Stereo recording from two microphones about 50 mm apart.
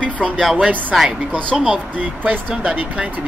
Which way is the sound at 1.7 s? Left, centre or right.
Right.